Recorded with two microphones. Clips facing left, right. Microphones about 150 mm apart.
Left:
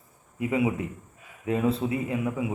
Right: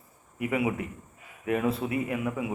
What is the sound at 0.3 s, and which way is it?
A man's voice, 25° left (ahead or behind).